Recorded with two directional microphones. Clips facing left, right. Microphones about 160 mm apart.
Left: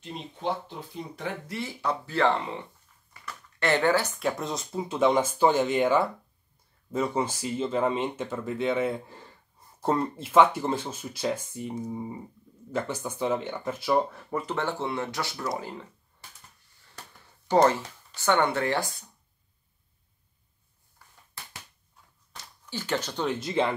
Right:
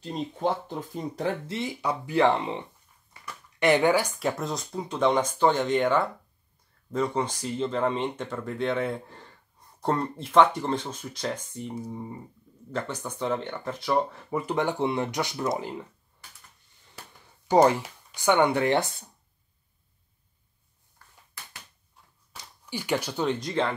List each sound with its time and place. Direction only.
0.0 s speech: 45° right (ahead or behind)
1.5 s speech: 15° right (ahead or behind)
3.1 s a sound: 15° right (ahead or behind)
4.2 s speech: centre (ahead or behind)
14.3 s speech: 15° right (ahead or behind)
17.5 s speech: 15° right (ahead or behind)
21.0 s a sound: 10° left (ahead or behind)
22.3 s a sound: 15° right (ahead or behind)
23.2 s speech: 5° left (ahead or behind)